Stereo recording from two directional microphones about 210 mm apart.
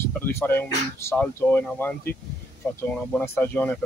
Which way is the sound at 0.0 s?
10° left (ahead or behind).